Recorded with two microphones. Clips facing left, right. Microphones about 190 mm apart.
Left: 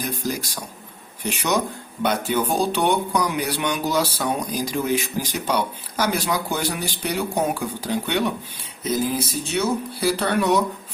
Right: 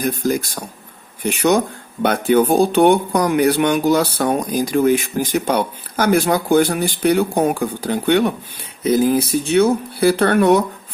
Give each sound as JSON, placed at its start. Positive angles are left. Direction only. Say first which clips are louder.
{"t": 0.0, "sound": "speech", "louder": "right 8 dB", "side_deg": -55}